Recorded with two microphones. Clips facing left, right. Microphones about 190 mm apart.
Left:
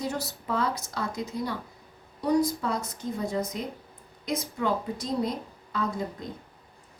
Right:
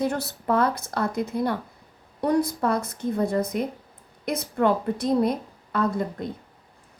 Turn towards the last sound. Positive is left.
turn(degrees=-60)  # may be behind; listen again after turning